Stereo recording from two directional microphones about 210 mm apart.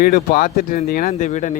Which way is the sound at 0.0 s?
40° left (ahead or behind).